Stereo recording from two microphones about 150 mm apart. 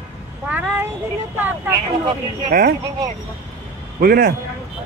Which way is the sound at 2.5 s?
65° right (ahead or behind).